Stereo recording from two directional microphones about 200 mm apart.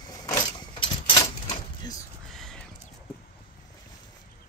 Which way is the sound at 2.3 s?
Centre (ahead or behind).